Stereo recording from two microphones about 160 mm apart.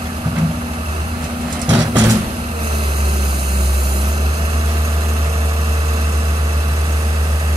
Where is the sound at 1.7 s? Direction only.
20° right (ahead or behind).